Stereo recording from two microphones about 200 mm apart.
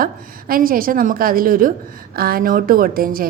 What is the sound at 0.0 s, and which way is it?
A woman's voice, 45° right (ahead or behind).